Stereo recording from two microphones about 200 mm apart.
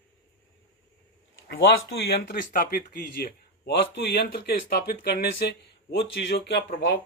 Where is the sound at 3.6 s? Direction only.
55° left (ahead or behind).